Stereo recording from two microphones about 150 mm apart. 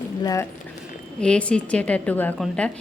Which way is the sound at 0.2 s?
25° left (ahead or behind).